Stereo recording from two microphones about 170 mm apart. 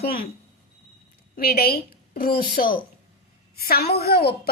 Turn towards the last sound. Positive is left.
turn(degrees=70)  # may be behind; listen again after turning